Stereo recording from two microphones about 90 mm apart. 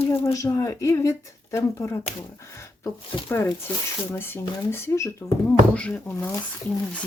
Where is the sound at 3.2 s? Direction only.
25° left (ahead or behind).